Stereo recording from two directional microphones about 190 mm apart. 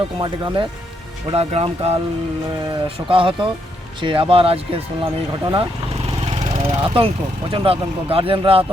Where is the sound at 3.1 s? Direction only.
25° right (ahead or behind).